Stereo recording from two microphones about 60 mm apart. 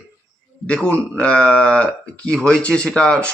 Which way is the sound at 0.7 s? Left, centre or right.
Left.